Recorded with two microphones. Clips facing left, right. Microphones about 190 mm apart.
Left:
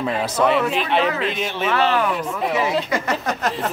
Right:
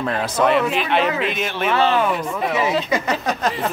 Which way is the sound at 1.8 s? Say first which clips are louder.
Right 2 dB; 20° right (ahead or behind).